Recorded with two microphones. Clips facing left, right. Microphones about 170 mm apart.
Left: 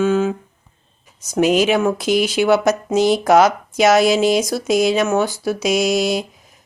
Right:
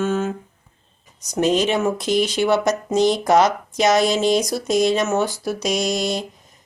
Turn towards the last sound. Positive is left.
turn(degrees=5)  # may be behind; listen again after turning